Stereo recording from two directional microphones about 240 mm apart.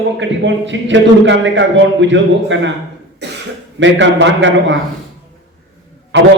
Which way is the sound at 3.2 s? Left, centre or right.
Right.